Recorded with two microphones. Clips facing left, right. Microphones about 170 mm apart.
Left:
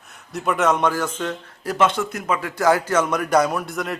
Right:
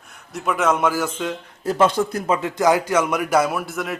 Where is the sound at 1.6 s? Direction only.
30° right (ahead or behind).